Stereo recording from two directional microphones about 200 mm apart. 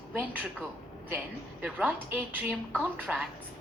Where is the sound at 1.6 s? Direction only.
5° right (ahead or behind).